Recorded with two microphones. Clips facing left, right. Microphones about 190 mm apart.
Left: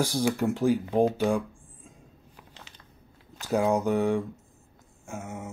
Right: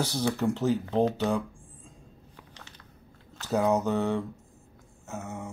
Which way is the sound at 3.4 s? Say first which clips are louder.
Left 1 dB; 10° left (ahead or behind).